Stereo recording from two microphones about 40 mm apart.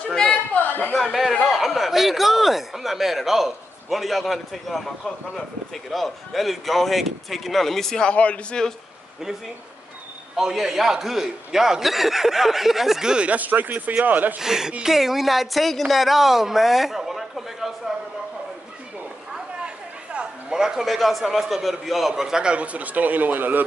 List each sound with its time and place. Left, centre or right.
0.1 s a sound: left
0.6 s a sound: left
1.0 s chuckle: centre
1.4 s speech: centre
5.9 s a woman's voice: centre
8.0 s a man's voice: left
10.3 s a man's voice: centre
13.0 s speech: right
13.3 s speech: right
14.4 s a man's voice: centre
19.6 s chatter: right
20.4 s a man's voice: centre
20.8 s a woman's voice: centre
22.4 s speech: right